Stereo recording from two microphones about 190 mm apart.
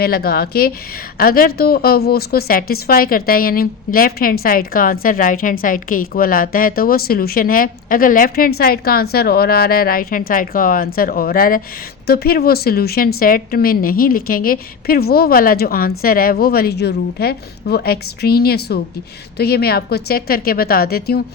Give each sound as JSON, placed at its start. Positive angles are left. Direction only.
{"t": 0.0, "sound": "a woman's voice", "side_deg": 55}